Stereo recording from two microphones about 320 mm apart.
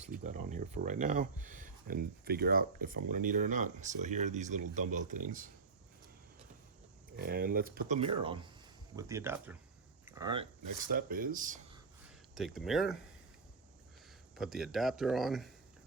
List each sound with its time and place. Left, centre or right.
0.2 s speech: right
7.2 s speech: right; by 9.6 s centre
10.1 s a sound: centre
10.8 s speech: right
12.3 s speech: centre
14.3 s speech: centre